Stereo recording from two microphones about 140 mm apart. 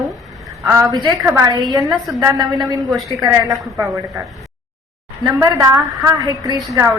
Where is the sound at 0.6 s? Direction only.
25° right (ahead or behind).